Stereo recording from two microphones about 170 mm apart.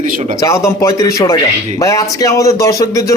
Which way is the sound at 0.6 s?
15° left (ahead or behind).